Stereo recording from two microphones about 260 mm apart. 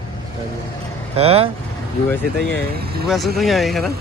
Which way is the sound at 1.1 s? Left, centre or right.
Right.